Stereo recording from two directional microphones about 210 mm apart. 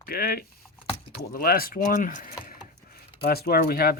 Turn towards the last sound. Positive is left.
turn(degrees=45)  # may be behind; listen again after turning